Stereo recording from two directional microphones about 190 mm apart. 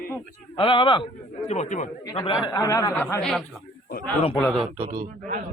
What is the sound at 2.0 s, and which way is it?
Speech, 25° left (ahead or behind).